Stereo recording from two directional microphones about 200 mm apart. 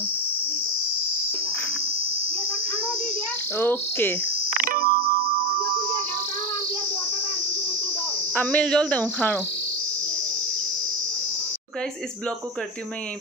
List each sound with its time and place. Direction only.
3.5 s speech: 10° left (ahead or behind)
4.5 s music: 45° right (ahead or behind)
8.4 s speech: 5° left (ahead or behind)